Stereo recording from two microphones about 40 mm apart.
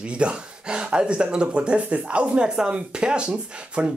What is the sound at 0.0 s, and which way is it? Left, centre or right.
Speech, right.